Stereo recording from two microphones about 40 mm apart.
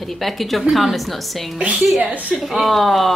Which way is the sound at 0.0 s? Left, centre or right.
Centre.